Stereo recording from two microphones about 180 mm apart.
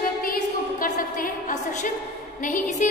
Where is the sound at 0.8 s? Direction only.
50° left (ahead or behind).